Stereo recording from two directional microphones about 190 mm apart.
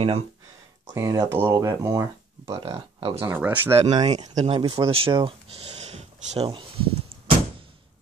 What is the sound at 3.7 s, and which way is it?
Speech, 25° right (ahead or behind).